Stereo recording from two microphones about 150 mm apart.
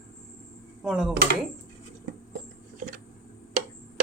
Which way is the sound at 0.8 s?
5° right (ahead or behind).